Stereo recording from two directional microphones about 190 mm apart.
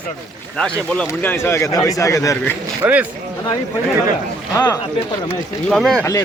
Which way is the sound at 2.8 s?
10° right (ahead or behind).